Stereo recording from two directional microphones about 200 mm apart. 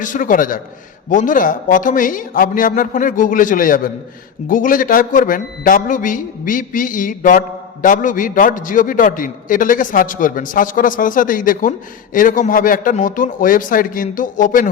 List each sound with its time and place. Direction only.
0.0 s a man's voice: 40° left (ahead or behind)